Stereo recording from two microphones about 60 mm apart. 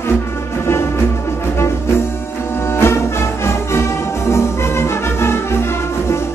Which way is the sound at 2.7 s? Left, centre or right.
Left.